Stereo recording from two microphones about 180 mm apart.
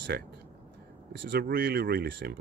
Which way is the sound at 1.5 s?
60° right (ahead or behind).